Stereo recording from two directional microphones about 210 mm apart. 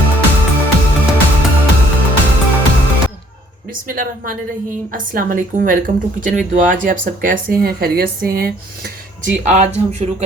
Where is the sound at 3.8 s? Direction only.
40° right (ahead or behind).